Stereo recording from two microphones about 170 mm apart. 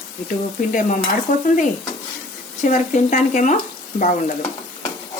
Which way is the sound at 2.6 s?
50° left (ahead or behind).